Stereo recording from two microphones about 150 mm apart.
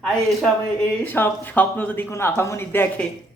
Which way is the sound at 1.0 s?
15° left (ahead or behind).